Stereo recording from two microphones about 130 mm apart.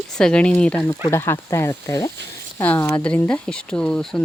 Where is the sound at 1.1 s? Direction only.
20° left (ahead or behind).